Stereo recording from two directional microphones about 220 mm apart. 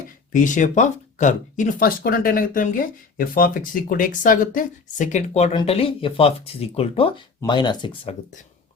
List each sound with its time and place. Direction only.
0.3 s speech: 35° left (ahead or behind)